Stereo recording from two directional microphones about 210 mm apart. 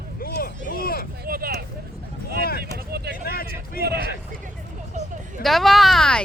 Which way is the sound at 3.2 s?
45° left (ahead or behind).